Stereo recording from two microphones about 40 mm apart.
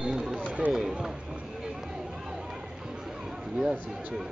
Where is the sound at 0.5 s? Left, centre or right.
Right.